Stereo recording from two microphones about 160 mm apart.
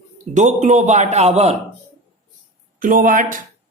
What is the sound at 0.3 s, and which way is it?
A man's voice, 45° right (ahead or behind).